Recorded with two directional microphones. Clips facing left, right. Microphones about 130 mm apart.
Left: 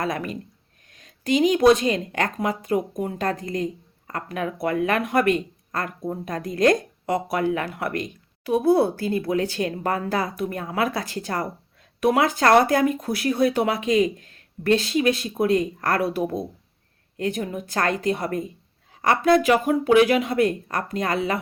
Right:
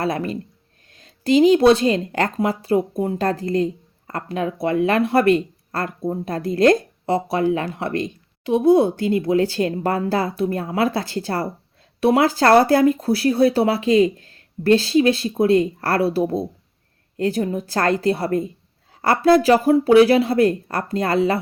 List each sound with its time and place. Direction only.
0.0 s speech: 30° right (ahead or behind)